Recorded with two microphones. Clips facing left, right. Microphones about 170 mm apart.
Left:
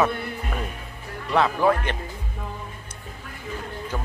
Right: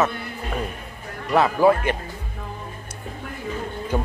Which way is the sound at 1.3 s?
5° right (ahead or behind).